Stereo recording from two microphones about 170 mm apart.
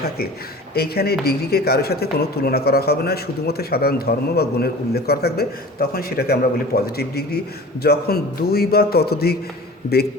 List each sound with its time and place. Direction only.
0.7 s a man's voice: 65° left (ahead or behind)